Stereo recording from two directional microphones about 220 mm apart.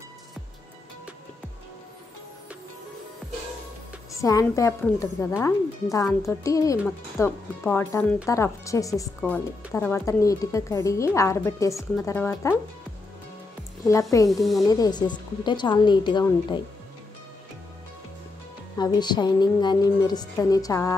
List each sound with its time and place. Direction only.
4.2 s speech: 15° left (ahead or behind)
13.8 s speech: 15° left (ahead or behind)
14.3 s a woman's voice: centre (ahead or behind)
14.6 s a woman's voice: 15° left (ahead or behind)
18.8 s a woman's voice: 20° left (ahead or behind)